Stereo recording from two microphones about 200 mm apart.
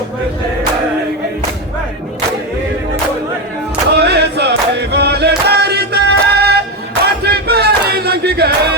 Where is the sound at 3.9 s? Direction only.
55° right (ahead or behind).